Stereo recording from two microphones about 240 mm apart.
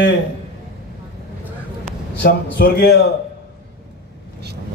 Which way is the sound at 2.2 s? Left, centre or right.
Left.